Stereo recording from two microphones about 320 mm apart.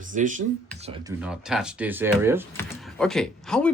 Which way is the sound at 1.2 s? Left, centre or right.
Centre.